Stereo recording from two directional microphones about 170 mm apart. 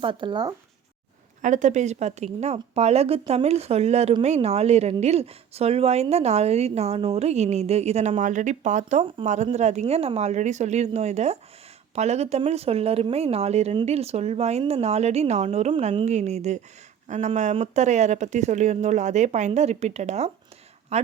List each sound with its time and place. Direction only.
0.0 s speech: 30° right (ahead or behind)
1.4 s a woman's voice: 45° right (ahead or behind)